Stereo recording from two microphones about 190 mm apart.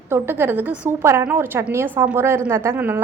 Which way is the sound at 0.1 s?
10° right (ahead or behind).